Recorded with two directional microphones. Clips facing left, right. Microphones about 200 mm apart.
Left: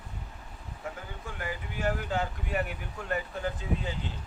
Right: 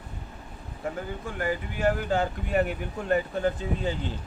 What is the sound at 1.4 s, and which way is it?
Speech, 35° right (ahead or behind).